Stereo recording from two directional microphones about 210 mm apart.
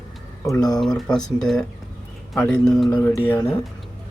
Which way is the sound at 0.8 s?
Centre (ahead or behind).